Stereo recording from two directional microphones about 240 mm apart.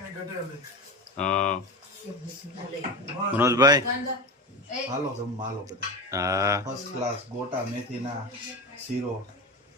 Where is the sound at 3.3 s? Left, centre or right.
Centre.